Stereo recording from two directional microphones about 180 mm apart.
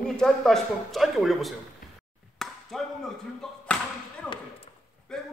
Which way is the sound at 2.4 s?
Centre (ahead or behind).